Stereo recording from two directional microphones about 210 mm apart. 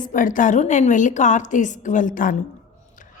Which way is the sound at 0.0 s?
40° left (ahead or behind).